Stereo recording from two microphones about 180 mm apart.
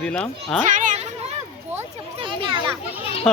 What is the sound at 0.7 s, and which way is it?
Children playing, 45° right (ahead or behind).